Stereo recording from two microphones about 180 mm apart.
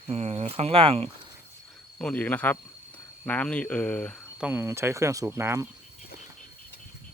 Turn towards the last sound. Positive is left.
turn(degrees=-15)  # may be behind; listen again after turning